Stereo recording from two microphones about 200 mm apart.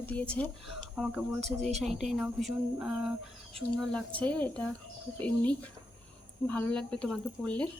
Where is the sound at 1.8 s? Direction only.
Centre (ahead or behind).